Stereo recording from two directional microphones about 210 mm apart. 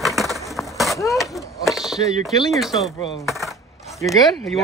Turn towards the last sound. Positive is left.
turn(degrees=0)  # may be behind; listen again after turning